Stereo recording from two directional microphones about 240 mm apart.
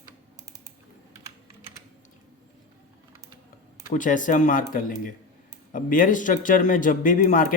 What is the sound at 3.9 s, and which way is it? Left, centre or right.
A man's voice, left.